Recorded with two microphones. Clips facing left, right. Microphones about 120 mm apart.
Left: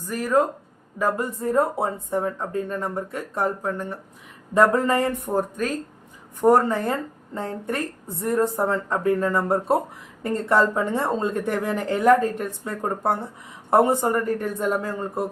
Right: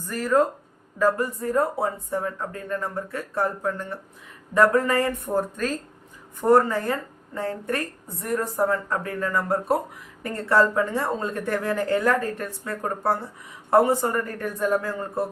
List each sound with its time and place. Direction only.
0.0 s a woman's voice: 15° left (ahead or behind)